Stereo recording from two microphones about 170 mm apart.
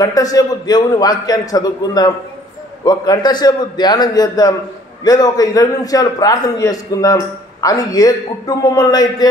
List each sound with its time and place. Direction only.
0.0 s a man's voice: 20° left (ahead or behind)